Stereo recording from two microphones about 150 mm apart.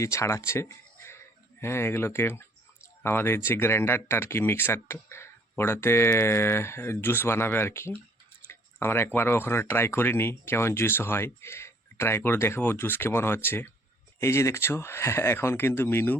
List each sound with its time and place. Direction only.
0.0 s speech: 20° left (ahead or behind)
8.4 s tick-tock: 15° left (ahead or behind)
9.1 s speech: 15° left (ahead or behind)